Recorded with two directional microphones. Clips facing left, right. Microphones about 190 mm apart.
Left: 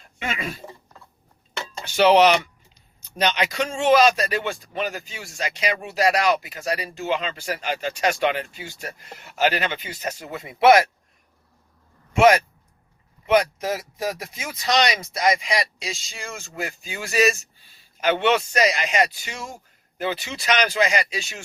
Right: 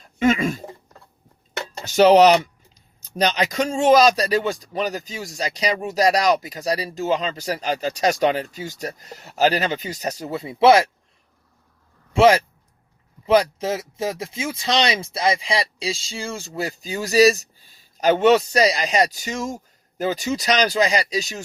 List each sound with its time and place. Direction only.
0.0 s a sound: 40° right (ahead or behind)
1.8 s a man's voice: 40° right (ahead or behind)
12.1 s a man's voice: 30° right (ahead or behind)